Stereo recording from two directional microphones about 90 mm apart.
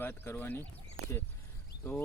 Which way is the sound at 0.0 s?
25° left (ahead or behind).